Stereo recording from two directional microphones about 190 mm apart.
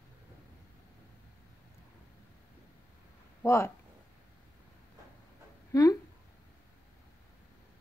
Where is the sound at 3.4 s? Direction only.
15° left (ahead or behind).